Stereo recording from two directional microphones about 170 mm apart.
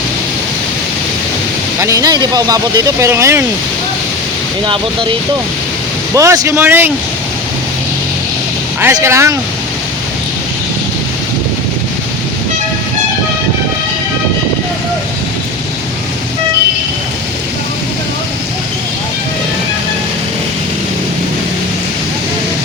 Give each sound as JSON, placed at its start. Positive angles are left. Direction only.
{"t": 1.8, "sound": "speech", "side_deg": -20}
{"t": 4.6, "sound": "speech", "side_deg": -30}
{"t": 6.1, "sound": "speech", "side_deg": -20}
{"t": 8.8, "sound": "speech", "side_deg": -15}